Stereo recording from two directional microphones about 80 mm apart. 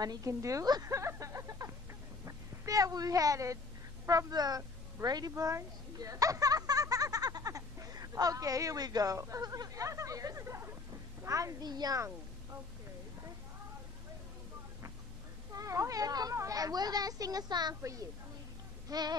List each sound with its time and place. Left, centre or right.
0.0 s a woman's voice: right
0.3 s a child's voice: right
0.8 s a sound: right
4.3 s speech: right
5.3 s a sound: right
9.4 s a child's voice: right
11.6 s a woman's voice: right
15.5 s a child's voice: right
18.9 s a woman's voice: right